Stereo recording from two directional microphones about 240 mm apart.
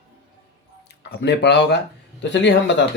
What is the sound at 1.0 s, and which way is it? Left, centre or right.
Speech, left.